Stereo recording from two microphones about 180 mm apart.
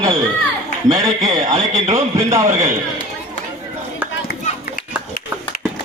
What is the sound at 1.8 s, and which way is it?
Speech, 35° right (ahead or behind).